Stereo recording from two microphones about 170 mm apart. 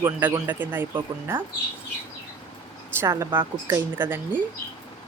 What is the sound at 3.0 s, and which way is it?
Speech, 15° right (ahead or behind).